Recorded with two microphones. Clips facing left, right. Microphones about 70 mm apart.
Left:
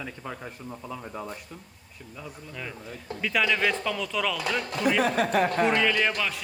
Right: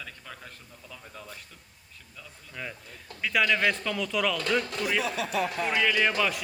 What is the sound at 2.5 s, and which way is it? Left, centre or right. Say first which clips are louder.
A man's voice: even; centre.